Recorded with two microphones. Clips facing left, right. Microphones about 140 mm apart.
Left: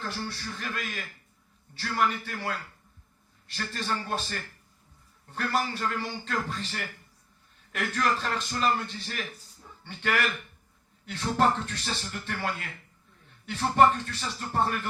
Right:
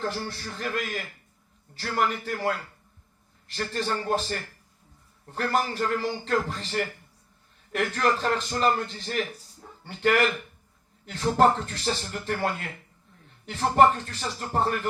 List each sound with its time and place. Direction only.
0.0 s speech: 40° right (ahead or behind)
3.5 s a man's voice: 30° right (ahead or behind)